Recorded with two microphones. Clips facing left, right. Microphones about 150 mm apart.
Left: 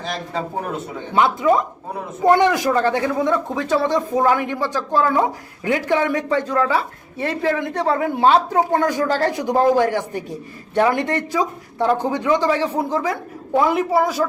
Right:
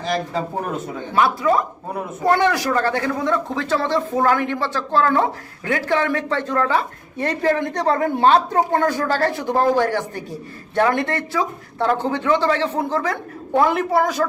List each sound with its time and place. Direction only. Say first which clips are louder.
1.1 s speech: left 1 dB; 20° left (ahead or behind)